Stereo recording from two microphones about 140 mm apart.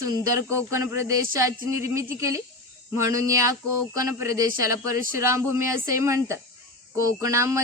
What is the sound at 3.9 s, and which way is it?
Speech, 25° right (ahead or behind).